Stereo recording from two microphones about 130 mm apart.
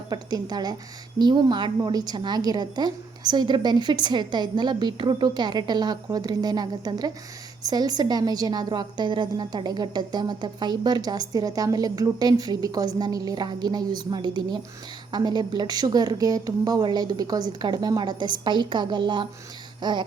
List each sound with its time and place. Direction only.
0.1 s a woman's voice: 30° right (ahead or behind)